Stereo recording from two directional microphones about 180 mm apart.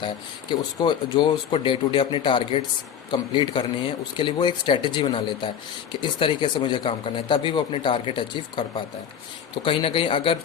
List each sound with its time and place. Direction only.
0.8 s speech: 25° left (ahead or behind)
9.6 s speech: 30° left (ahead or behind)